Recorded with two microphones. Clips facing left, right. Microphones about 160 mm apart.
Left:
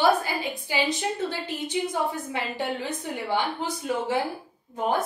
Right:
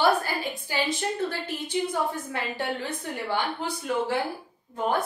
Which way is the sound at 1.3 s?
20° left (ahead or behind).